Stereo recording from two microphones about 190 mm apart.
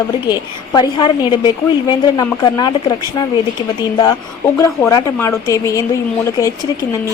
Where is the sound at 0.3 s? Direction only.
25° left (ahead or behind).